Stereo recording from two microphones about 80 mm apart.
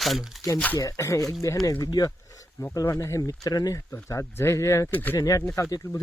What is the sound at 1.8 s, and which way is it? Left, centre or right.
Speech, left.